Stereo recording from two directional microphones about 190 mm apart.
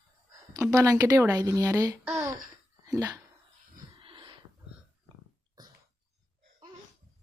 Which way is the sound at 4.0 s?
25° right (ahead or behind).